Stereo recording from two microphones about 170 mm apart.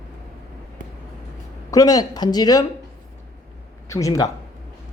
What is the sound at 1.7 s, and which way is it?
Speech, 20° left (ahead or behind).